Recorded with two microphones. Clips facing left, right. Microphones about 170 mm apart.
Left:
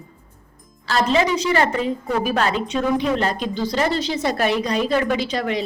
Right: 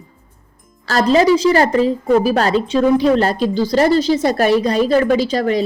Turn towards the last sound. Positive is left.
turn(degrees=-40)  # may be behind; listen again after turning